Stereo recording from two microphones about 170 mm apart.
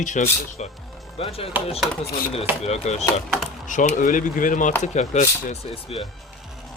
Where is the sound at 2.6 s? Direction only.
40° left (ahead or behind).